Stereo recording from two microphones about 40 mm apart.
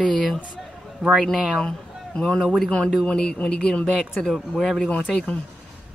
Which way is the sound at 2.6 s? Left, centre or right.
Centre.